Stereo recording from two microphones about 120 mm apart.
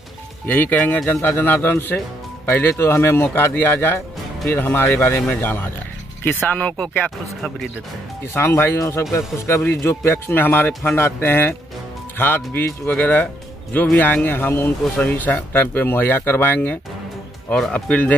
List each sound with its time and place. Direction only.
0.5 s speech: 15° left (ahead or behind)
8.3 s speech: 20° left (ahead or behind)